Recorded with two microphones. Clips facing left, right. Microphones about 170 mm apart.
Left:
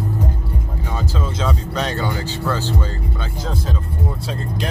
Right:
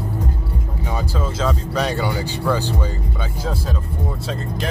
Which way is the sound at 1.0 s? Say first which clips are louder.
Even; 5° right (ahead or behind).